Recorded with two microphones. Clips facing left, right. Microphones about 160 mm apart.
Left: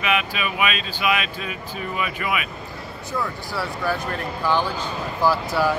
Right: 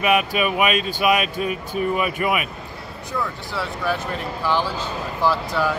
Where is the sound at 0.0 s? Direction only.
45° right (ahead or behind).